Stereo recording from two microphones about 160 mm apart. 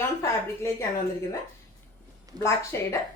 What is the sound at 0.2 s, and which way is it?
Speech, 15° left (ahead or behind).